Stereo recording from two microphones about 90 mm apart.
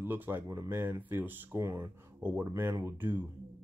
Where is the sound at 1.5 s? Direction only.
30° right (ahead or behind).